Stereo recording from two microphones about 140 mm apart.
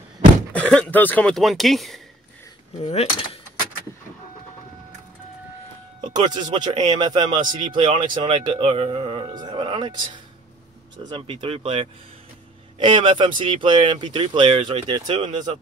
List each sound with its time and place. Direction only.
0.5 s speech: 10° left (ahead or behind)
2.8 s cutlery: 45° left (ahead or behind)
6.0 s speech: 30° right (ahead or behind)